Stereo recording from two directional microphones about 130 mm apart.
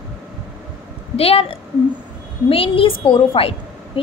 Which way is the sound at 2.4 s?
45° left (ahead or behind).